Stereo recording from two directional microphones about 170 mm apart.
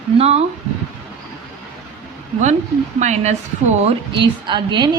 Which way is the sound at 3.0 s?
45° right (ahead or behind).